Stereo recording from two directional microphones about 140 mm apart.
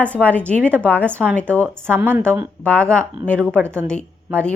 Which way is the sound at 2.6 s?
10° left (ahead or behind).